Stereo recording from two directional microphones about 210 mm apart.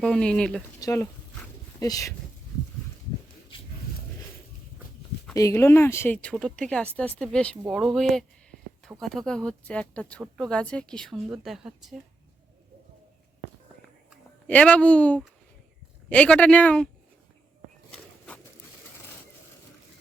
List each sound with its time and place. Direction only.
0.0 s speech: 5° left (ahead or behind)
0.8 s speech: 15° left (ahead or behind)
5.3 s speech: 15° left (ahead or behind)
7.6 s a sound: centre (ahead or behind)
8.9 s speech: centre (ahead or behind)
14.1 s speech: 5° left (ahead or behind)